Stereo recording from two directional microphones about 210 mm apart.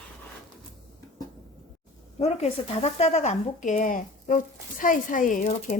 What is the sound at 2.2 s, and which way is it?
Speech, 30° left (ahead or behind).